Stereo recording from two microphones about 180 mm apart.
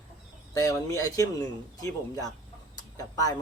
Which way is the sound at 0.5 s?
15° left (ahead or behind).